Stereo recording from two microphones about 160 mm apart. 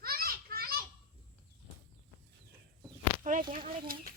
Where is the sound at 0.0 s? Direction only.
70° right (ahead or behind).